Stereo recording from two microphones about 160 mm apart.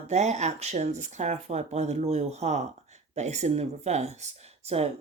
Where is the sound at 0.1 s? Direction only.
45° right (ahead or behind).